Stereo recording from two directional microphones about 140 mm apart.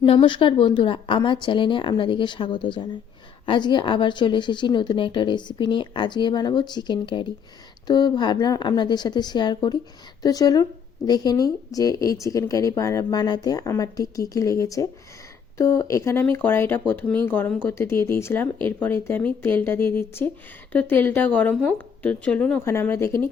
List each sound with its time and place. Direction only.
0.0 s speech: 35° left (ahead or behind); by 23.3 s 20° left (ahead or behind)